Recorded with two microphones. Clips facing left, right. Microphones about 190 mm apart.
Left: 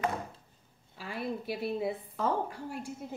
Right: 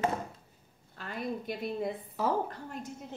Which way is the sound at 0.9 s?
5° left (ahead or behind).